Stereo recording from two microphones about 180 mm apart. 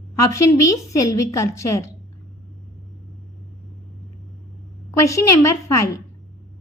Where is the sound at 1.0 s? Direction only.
15° left (ahead or behind).